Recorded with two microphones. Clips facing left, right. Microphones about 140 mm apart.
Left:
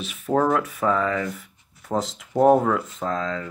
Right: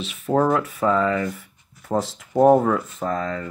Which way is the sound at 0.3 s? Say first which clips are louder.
Right 1 dB; 5° right (ahead or behind).